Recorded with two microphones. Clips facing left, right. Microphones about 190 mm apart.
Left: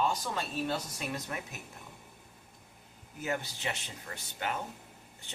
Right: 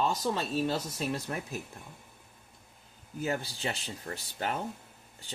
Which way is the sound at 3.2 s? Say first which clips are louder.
Right 3 dB; 30° right (ahead or behind).